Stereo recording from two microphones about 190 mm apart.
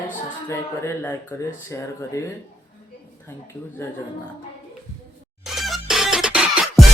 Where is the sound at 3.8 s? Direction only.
15° left (ahead or behind).